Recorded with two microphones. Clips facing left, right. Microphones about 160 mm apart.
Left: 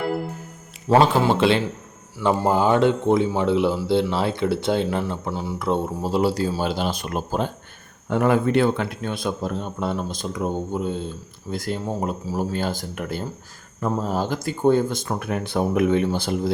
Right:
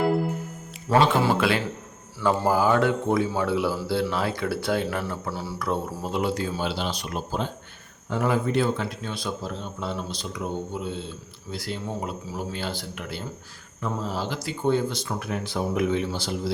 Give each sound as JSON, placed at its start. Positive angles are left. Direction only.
{"t": 0.9, "sound": "speech", "side_deg": 35}
{"t": 1.3, "sound": "a man's voice", "side_deg": 25}